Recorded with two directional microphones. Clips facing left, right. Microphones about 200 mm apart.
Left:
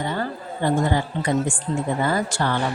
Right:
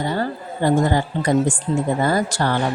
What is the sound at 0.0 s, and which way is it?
A woman's voice, 35° right (ahead or behind).